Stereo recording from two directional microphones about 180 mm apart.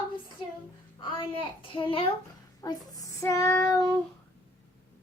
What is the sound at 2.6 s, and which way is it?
Child singing, 20° left (ahead or behind).